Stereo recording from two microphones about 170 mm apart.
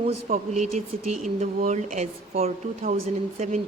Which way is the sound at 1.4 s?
40° right (ahead or behind).